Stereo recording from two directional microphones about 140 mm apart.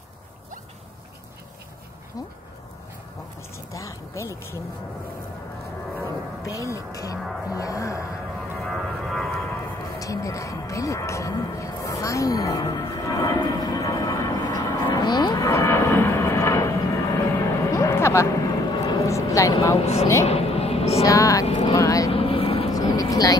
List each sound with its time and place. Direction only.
3.7 s speech: 20° left (ahead or behind)
6.4 s speech: 25° left (ahead or behind)
8.6 s a sound: 5° left (ahead or behind)
9.9 s speech: 25° left (ahead or behind)
17.6 s vehicle: 20° left (ahead or behind)
19.8 s speech: 45° left (ahead or behind)
20.2 s a sound: 45° left (ahead or behind)
21.0 s speech: 20° left (ahead or behind)
21.5 s speech: 40° left (ahead or behind)
21.7 s speech: 25° left (ahead or behind)
22.1 s vehicle: 40° left (ahead or behind)
22.7 s vehicle: 25° left (ahead or behind)